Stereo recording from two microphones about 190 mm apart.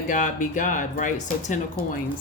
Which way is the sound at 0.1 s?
40° left (ahead or behind).